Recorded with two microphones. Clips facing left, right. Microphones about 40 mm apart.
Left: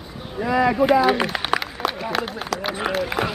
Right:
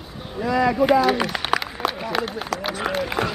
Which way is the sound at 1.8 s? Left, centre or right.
Centre.